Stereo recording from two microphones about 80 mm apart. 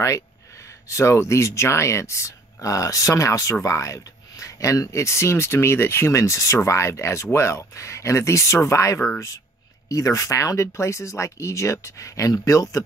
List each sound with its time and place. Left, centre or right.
0.0 s speech: left